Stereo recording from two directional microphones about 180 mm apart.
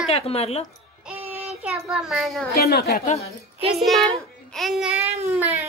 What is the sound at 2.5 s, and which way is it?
Speech, 60° left (ahead or behind).